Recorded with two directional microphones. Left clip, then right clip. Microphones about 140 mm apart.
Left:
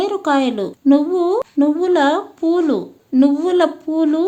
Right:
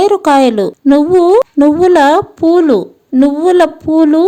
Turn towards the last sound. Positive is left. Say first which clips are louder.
# right 8 dB
turn(degrees=-45)  # may be behind; listen again after turning